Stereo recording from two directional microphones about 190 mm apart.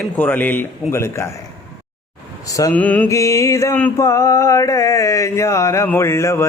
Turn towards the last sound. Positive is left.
turn(degrees=15)  # may be behind; listen again after turning